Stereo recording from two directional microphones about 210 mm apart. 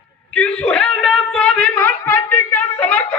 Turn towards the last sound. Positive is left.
turn(degrees=10)  # may be behind; listen again after turning